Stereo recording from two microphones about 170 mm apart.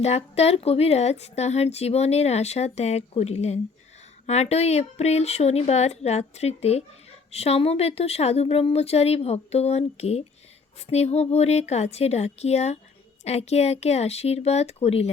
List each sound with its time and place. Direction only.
0.0 s a woman's voice: 40° left (ahead or behind)